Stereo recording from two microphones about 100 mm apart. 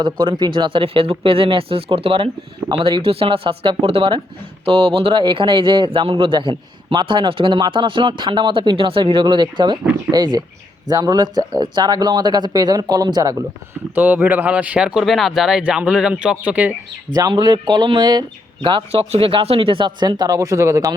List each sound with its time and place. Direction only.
0.0 s speech: 55° right (ahead or behind)
2.6 s speech: 55° right (ahead or behind)
3.8 s speech: 85° right
4.6 s speech: 65° right (ahead or behind); by 13.4 s 40° right (ahead or behind)
13.9 s speech: 20° right (ahead or behind)
17.2 s speech: 45° right (ahead or behind); by 20.9 s 30° right (ahead or behind)